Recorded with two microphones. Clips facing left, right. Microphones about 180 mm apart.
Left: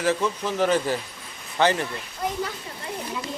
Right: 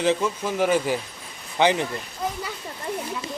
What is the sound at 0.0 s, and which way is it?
Speech, 15° right (ahead or behind).